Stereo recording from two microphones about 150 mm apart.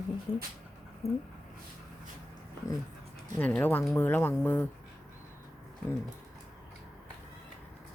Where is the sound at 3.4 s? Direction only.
10° left (ahead or behind).